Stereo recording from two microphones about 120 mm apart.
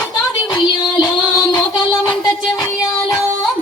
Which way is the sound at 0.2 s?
30° left (ahead or behind).